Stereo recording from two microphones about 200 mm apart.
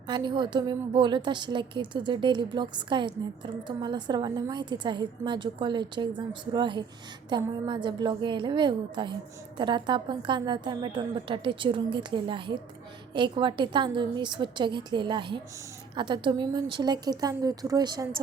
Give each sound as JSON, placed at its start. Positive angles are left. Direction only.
{"t": 0.1, "sound": "a woman's voice", "side_deg": -25}